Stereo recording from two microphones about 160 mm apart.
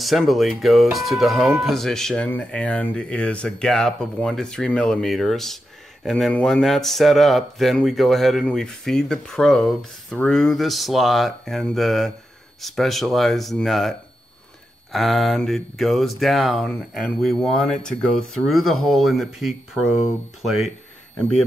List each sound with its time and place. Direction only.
0.0 s speech: centre (ahead or behind)